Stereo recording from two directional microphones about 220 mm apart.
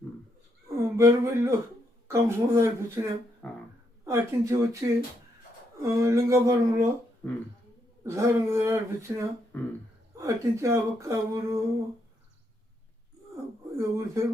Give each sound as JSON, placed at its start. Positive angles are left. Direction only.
{"t": 0.9, "sound": "speech", "side_deg": -15}
{"t": 3.4, "sound": "dog", "side_deg": 5}
{"t": 4.0, "sound": "speech", "side_deg": -10}
{"t": 7.2, "sound": "speech", "side_deg": 5}
{"t": 8.0, "sound": "speech", "side_deg": -10}
{"t": 9.5, "sound": "speech", "side_deg": 5}
{"t": 10.2, "sound": "speech", "side_deg": -15}
{"t": 13.7, "sound": "speech", "side_deg": -15}